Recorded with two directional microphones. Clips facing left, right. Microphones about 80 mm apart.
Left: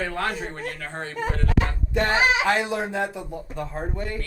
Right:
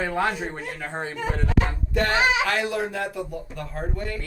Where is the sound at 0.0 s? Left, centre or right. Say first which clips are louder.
Right 3 dB; centre.